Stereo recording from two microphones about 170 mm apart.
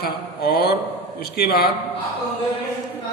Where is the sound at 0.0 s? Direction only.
70° left (ahead or behind).